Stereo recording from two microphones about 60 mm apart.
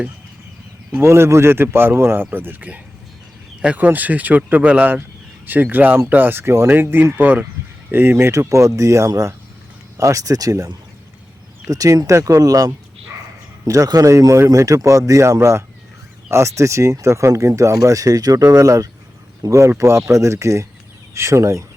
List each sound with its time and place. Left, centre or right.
1.0 s speech: right
3.8 s speech: right
8.3 s speech: right
11.7 s speech: right
13.7 s speech: right
14.5 s speech: right
19.6 s speech: right